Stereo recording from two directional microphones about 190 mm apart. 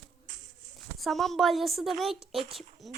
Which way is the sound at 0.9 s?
Centre (ahead or behind).